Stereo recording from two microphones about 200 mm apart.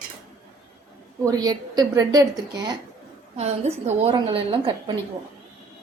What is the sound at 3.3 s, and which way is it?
A woman's voice, 30° right (ahead or behind).